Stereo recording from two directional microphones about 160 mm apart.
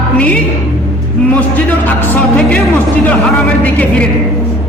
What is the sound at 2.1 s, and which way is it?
Speech, 10° left (ahead or behind).